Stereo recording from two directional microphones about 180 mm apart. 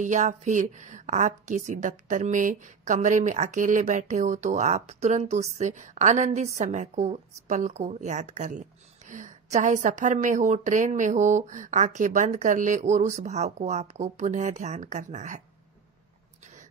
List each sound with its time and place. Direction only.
0.0 s a woman's voice: 45° right (ahead or behind)